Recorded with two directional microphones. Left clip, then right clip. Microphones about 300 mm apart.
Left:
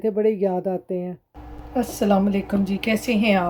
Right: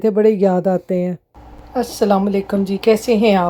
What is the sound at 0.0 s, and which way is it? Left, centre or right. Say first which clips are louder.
A woman's voice: right 7 dB; centre.